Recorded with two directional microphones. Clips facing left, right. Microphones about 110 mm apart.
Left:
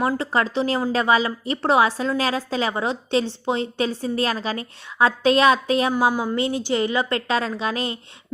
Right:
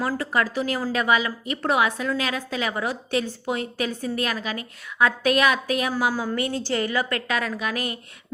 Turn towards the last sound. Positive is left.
turn(degrees=25)  # may be behind; listen again after turning